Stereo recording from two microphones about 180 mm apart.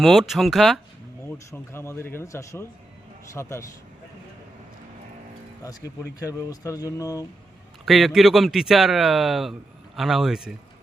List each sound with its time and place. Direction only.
0.0 s speech: centre (ahead or behind)
1.2 s speech: 15° left (ahead or behind)
6.1 s speech: 20° left (ahead or behind)
7.9 s speech: centre (ahead or behind)